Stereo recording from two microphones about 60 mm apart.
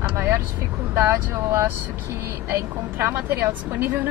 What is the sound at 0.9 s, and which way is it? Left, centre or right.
Speech, right.